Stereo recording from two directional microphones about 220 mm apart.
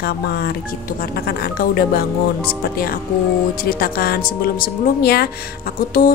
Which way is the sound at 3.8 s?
40° left (ahead or behind).